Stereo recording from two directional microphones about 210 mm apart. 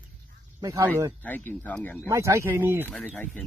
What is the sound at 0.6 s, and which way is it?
Speech, 15° right (ahead or behind).